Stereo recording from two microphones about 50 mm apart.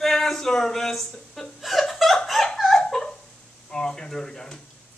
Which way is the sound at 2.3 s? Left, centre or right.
Centre.